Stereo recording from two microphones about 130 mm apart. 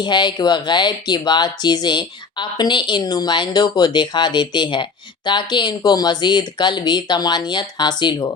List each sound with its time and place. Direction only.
0.0 s speech: 35° left (ahead or behind)